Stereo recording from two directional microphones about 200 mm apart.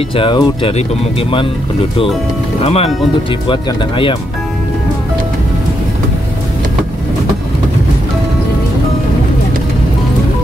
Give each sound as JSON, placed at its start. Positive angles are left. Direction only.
{"t": 0.1, "sound": "speech", "side_deg": 25}
{"t": 2.6, "sound": "speech", "side_deg": 30}